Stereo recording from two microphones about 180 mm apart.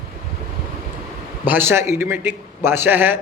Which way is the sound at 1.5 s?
10° right (ahead or behind).